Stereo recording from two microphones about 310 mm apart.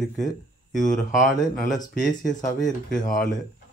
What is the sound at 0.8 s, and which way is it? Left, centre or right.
Speech, left.